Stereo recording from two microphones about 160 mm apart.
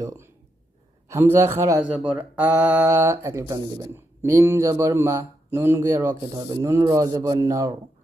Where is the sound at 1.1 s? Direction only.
15° right (ahead or behind).